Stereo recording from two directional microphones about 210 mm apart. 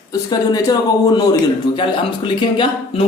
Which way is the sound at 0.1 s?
20° left (ahead or behind).